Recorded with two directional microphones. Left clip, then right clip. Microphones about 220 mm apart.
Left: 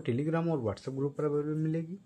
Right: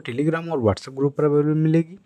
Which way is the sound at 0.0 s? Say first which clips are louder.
Right 8 dB; 45° right (ahead or behind).